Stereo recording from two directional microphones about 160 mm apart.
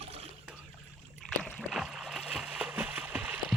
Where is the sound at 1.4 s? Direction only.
Centre (ahead or behind).